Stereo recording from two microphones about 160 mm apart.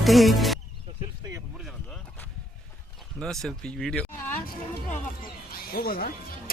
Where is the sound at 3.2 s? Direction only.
5° left (ahead or behind).